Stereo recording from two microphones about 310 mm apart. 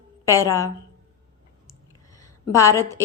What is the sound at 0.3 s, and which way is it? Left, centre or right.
Speech, centre.